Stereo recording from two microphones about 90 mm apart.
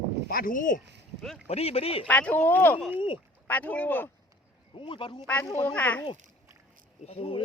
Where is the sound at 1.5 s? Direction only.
90° left.